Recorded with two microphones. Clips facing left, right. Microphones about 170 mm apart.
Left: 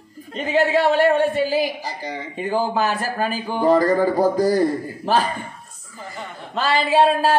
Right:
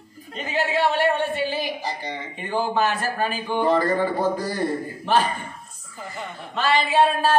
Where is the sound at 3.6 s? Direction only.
40° left (ahead or behind).